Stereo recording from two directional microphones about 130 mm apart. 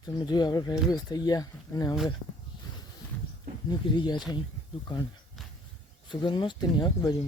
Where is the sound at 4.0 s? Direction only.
35° left (ahead or behind).